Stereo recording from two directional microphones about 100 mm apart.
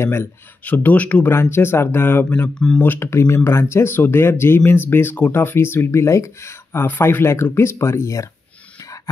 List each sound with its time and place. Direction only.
0.0 s speech: 25° left (ahead or behind)